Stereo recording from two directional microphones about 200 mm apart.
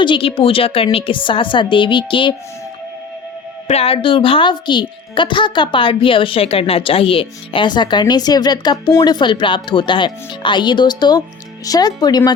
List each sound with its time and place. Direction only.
0.0 s a woman's voice: 25° left (ahead or behind)
3.7 s a woman's voice: 30° left (ahead or behind)